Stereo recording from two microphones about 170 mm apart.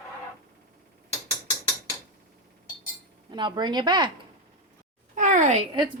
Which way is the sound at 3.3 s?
25° right (ahead or behind).